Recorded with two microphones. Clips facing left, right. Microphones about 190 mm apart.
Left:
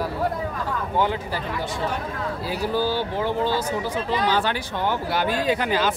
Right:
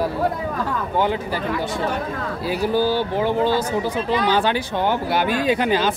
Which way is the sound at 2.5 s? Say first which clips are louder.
Right 5 dB; 15° right (ahead or behind).